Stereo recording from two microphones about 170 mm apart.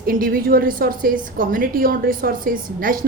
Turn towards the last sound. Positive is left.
turn(degrees=-55)  # may be behind; listen again after turning